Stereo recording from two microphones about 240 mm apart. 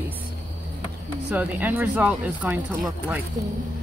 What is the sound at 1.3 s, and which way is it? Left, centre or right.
Speech, centre.